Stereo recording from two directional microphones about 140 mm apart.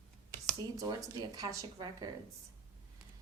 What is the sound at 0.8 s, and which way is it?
A woman's voice, 25° right (ahead or behind).